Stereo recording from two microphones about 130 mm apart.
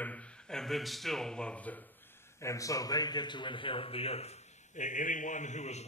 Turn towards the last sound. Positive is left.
turn(degrees=60)  # may be behind; listen again after turning